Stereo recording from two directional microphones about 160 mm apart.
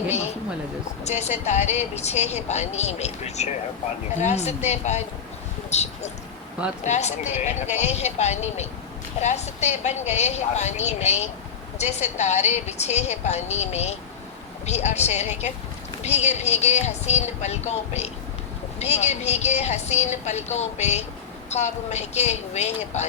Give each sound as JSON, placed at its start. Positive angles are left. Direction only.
{"t": 1.0, "sound": "speech", "side_deg": 45}